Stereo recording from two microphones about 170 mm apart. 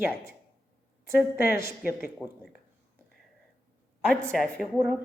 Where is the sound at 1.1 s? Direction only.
65° left (ahead or behind).